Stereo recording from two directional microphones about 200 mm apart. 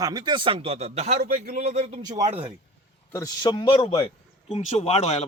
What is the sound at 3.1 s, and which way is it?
A man's voice, 15° left (ahead or behind).